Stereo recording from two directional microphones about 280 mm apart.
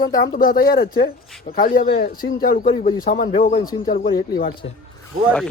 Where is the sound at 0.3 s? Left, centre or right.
Left.